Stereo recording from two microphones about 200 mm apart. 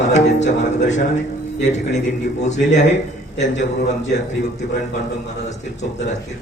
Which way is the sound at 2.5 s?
35° left (ahead or behind).